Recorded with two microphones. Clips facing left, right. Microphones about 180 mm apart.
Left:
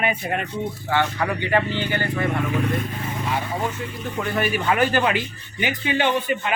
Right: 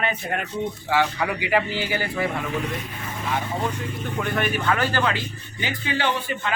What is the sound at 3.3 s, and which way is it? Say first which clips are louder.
Speech: right 2 dB; 5° left (ahead or behind).